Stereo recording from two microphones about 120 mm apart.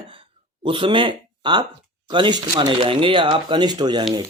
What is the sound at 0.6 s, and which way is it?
Speech, 45° right (ahead or behind).